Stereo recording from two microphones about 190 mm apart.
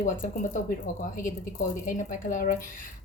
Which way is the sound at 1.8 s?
45° left (ahead or behind).